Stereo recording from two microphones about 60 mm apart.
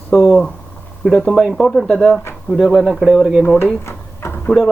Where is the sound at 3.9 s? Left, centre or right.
Left.